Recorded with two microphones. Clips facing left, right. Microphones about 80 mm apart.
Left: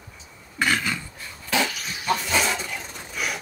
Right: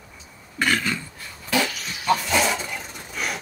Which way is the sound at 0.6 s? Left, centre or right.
Centre.